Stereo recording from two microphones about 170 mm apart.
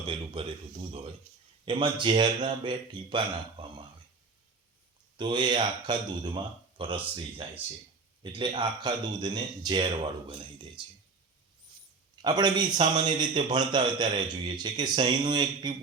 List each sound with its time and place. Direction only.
0.0 s speech: 30° right (ahead or behind)
5.1 s speech: 25° right (ahead or behind)
12.2 s speech: 25° right (ahead or behind)